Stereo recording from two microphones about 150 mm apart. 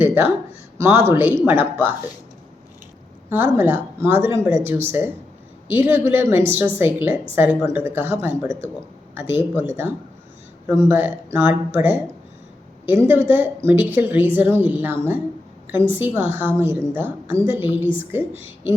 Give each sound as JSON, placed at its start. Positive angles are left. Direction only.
{"t": 0.0, "sound": "a sound", "side_deg": -10}
{"t": 0.8, "sound": "a woman's voice", "side_deg": -15}
{"t": 3.2, "sound": "a woman's voice", "side_deg": -15}